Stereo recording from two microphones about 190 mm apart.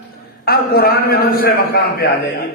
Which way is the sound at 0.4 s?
55° left (ahead or behind).